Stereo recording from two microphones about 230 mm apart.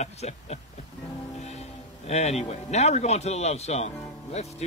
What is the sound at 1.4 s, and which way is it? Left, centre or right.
Speech, left.